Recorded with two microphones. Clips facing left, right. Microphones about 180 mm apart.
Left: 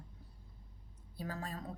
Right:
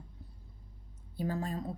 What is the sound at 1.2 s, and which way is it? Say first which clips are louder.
Speech: right 8 dB; 25° right (ahead or behind).